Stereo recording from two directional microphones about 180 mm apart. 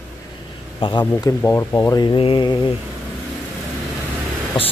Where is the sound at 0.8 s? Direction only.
30° left (ahead or behind).